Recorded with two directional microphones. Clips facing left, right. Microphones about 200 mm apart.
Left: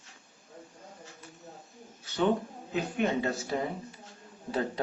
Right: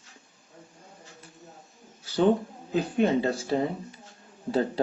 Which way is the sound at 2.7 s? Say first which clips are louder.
Right 5 dB; 30° right (ahead or behind).